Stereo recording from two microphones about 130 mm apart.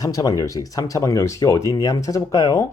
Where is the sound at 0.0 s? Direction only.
25° left (ahead or behind).